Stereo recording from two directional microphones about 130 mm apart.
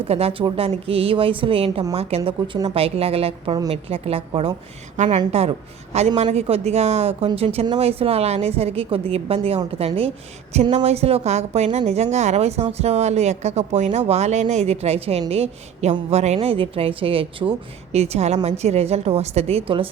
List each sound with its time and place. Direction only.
0.1 s a woman's voice: 50° right (ahead or behind)
4.9 s a woman's voice: 65° right (ahead or behind); by 17.5 s 45° right (ahead or behind)
17.9 s a woman's voice: 55° right (ahead or behind)